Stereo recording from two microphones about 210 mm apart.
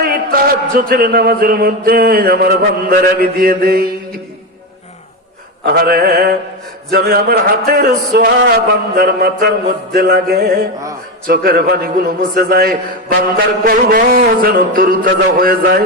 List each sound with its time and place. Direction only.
0.0 s a man's voice: 45° right (ahead or behind)
5.6 s a man's voice: 50° right (ahead or behind)